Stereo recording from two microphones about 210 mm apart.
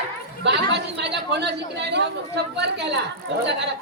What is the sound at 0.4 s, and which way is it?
A man's voice, 55° right (ahead or behind).